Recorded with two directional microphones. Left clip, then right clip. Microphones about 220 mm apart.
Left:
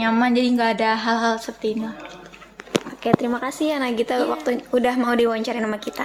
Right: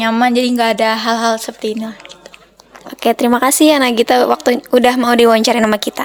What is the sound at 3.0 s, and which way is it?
Speech, 50° right (ahead or behind).